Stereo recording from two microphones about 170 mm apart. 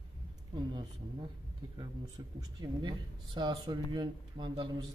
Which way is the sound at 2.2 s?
25° right (ahead or behind).